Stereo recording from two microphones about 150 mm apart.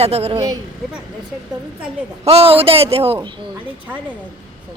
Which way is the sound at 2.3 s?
40° right (ahead or behind).